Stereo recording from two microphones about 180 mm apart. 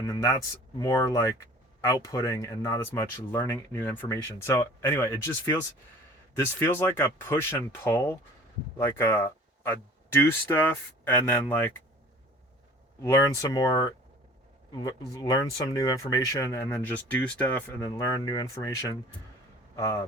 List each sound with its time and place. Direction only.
0.1 s speech: 20° left (ahead or behind)
13.0 s speech: 15° left (ahead or behind)